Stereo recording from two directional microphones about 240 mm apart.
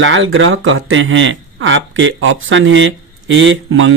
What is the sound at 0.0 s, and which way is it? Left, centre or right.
Speech, right.